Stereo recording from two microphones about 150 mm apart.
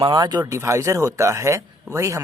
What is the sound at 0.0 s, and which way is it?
Speech, 30° right (ahead or behind).